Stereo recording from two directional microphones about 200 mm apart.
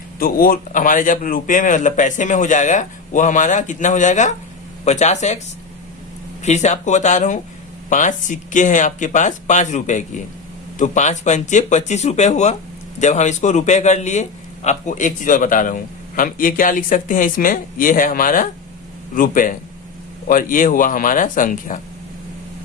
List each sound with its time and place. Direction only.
0.2 s a man's voice: 45° left (ahead or behind)
6.4 s a man's voice: 35° left (ahead or behind)